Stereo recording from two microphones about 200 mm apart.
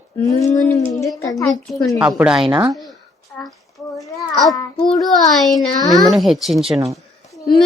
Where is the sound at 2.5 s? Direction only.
15° right (ahead or behind).